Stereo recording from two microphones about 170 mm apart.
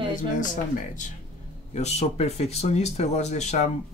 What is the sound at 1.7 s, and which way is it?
Speech, 40° left (ahead or behind).